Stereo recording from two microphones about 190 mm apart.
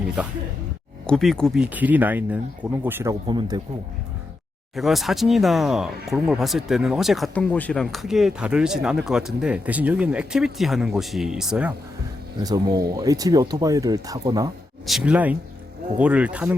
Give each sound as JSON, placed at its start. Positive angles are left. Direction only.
{"t": 1.0, "sound": "speech", "side_deg": 0}
{"t": 4.7, "sound": "speech", "side_deg": 0}
{"t": 12.4, "sound": "speech", "side_deg": -20}
{"t": 14.8, "sound": "speech", "side_deg": -5}